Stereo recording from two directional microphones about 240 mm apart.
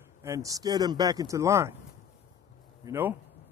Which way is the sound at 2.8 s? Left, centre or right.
Centre.